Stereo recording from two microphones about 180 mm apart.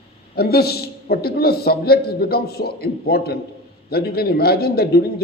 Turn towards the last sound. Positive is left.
turn(degrees=60)  # may be behind; listen again after turning